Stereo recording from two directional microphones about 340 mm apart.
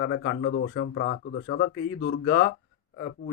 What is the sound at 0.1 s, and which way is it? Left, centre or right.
Speech, left.